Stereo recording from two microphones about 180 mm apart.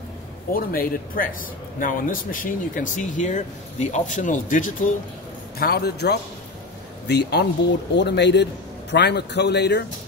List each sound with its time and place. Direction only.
0.5 s speech: 50° left (ahead or behind)
5.6 s a man's voice: 60° left (ahead or behind)